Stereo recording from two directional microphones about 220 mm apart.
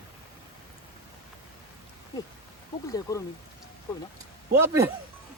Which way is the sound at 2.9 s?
15° left (ahead or behind).